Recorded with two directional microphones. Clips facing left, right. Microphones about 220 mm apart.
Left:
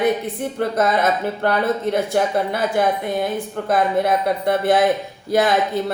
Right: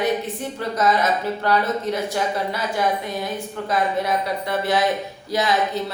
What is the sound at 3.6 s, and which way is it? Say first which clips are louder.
Speech: left 4 dB; 55° left (ahead or behind).